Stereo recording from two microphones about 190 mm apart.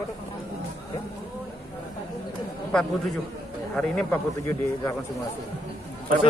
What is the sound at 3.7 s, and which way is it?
Speech, 5° left (ahead or behind).